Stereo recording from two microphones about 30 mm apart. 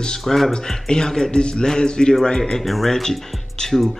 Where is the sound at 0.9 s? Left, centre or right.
Left.